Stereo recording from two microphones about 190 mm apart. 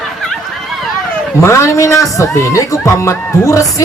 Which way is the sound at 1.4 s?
15° left (ahead or behind).